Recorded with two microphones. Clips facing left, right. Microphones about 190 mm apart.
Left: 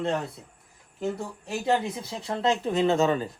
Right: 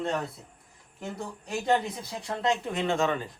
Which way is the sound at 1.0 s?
Centre (ahead or behind).